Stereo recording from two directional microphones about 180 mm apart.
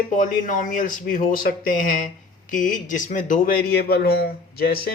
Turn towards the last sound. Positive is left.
turn(degrees=60)  # may be behind; listen again after turning